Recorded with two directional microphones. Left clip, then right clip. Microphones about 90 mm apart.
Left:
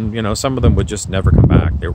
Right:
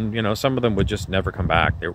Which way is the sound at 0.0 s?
15° left (ahead or behind).